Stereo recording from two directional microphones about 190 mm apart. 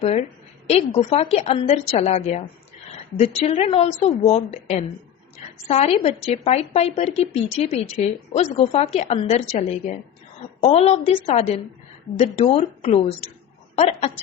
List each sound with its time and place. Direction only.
0.0 s a woman's voice: 35° left (ahead or behind)